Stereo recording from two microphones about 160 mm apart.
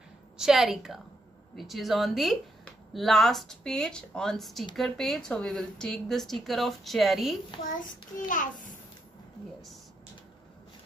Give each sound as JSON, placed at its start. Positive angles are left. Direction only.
{"t": 0.4, "sound": "speech", "side_deg": -5}
{"t": 8.3, "sound": "a child's voice", "side_deg": 55}